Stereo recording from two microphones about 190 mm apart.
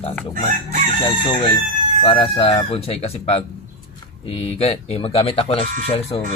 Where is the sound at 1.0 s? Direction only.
30° left (ahead or behind).